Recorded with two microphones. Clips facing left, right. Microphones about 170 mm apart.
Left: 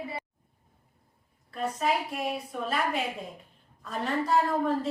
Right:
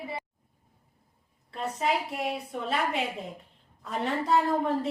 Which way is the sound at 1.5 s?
25° right (ahead or behind).